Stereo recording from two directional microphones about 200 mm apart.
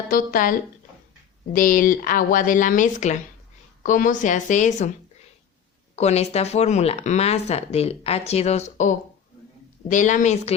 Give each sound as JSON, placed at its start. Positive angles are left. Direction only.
{"t": 0.1, "sound": "speech", "side_deg": 45}
{"t": 1.5, "sound": "speech", "side_deg": 45}
{"t": 6.0, "sound": "speech", "side_deg": 30}